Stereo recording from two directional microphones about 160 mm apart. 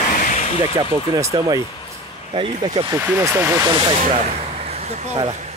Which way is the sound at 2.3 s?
30° right (ahead or behind).